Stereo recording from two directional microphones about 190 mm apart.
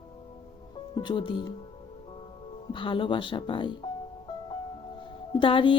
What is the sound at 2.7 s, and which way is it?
Music, 25° left (ahead or behind).